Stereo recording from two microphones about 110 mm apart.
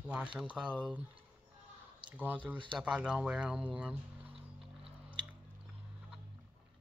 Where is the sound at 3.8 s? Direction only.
15° right (ahead or behind).